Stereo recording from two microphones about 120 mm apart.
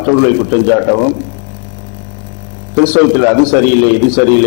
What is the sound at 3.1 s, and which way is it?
A man's voice, 20° left (ahead or behind).